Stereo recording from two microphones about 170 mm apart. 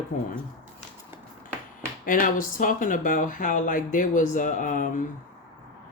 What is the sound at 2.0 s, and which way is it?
Speech, 50° left (ahead or behind).